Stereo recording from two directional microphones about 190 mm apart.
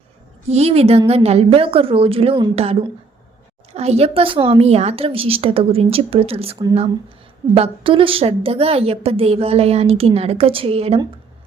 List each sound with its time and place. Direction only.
0.4 s a woman's voice: 35° right (ahead or behind)